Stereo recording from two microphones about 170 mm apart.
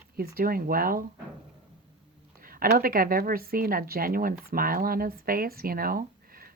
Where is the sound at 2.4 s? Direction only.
55° right (ahead or behind).